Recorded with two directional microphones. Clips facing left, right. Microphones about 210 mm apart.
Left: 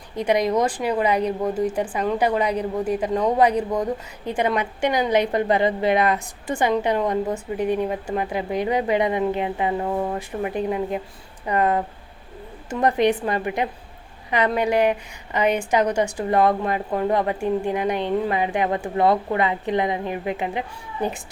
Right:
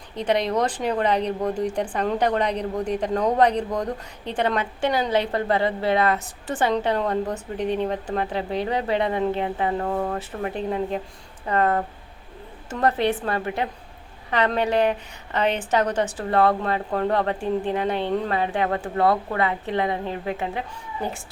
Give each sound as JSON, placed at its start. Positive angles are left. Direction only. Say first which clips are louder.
{"t": 0.2, "sound": "a woman's voice", "louder": "left 2 dB", "side_deg": 10}
{"t": 12.8, "sound": "a woman's voice", "louder": "left 3 dB", "side_deg": 15}